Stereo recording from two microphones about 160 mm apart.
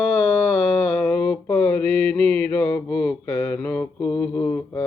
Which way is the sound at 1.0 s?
5° left (ahead or behind).